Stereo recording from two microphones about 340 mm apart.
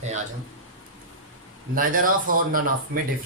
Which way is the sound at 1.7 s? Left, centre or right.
Right.